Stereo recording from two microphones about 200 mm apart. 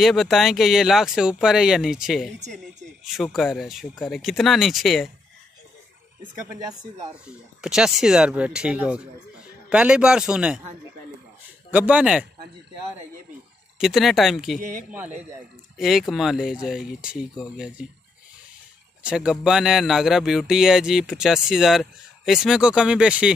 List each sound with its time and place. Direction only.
0.0 s speech: centre (ahead or behind)
6.3 s speech: 15° right (ahead or behind)
7.2 s speech: 5° right (ahead or behind)
11.7 s speech: 5° right (ahead or behind)
13.7 s speech: centre (ahead or behind)
14.6 s speech: 40° right (ahead or behind)
15.8 s speech: centre (ahead or behind)
19.0 s speech: 5° right (ahead or behind)